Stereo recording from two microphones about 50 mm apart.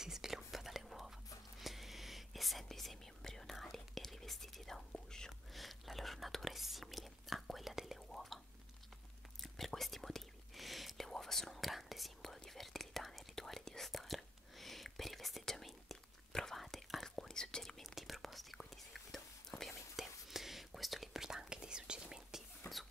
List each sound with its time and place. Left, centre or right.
0.0 s whispering: centre
5.5 s whispering: centre
9.4 s whispering: centre
22.7 s a sound: left